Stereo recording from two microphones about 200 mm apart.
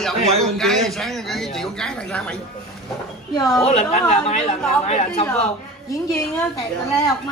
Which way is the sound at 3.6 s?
35° left (ahead or behind).